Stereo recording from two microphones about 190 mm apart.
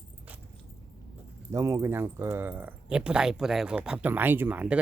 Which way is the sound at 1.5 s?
15° right (ahead or behind).